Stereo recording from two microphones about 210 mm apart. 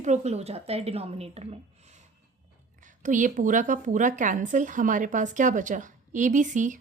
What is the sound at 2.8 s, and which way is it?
A woman's voice, 35° right (ahead or behind).